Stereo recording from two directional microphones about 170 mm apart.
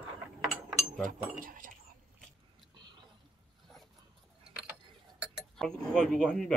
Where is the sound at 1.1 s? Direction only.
55° right (ahead or behind).